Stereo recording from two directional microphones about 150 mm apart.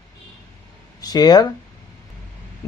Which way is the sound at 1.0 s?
25° left (ahead or behind).